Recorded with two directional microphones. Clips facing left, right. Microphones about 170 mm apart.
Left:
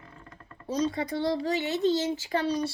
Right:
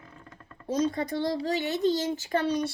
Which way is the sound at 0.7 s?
45° right (ahead or behind).